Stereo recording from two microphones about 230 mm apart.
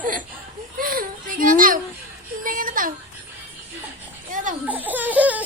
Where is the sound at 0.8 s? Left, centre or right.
Right.